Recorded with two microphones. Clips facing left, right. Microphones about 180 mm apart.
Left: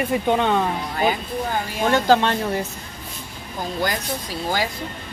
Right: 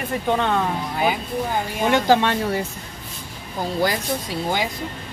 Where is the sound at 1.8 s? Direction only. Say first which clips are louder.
Even; 15° right (ahead or behind).